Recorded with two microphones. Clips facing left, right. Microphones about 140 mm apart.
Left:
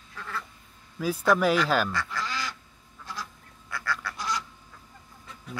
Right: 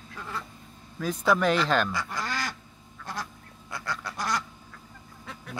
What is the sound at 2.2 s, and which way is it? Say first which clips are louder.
Duck: right 1 dB; 50° right (ahead or behind).